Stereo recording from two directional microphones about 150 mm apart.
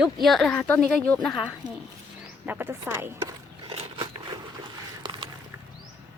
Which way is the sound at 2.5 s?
15° right (ahead or behind).